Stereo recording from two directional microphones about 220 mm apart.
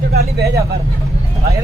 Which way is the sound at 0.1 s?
45° right (ahead or behind).